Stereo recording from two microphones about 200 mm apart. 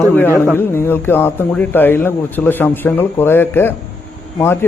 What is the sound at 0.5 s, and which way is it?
Speech, 10° left (ahead or behind).